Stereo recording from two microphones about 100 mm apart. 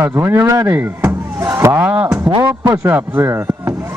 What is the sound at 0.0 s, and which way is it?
Speech, 25° right (ahead or behind).